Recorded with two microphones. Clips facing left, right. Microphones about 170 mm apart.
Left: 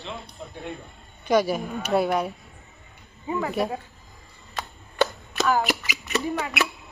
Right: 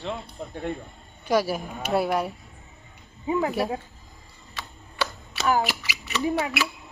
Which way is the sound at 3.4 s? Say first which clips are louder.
Even; centre (ahead or behind).